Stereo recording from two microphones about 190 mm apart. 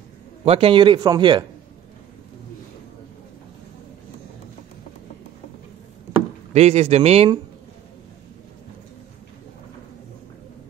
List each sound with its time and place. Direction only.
0.5 s speech: 30° right (ahead or behind)
6.5 s speech: 35° right (ahead or behind)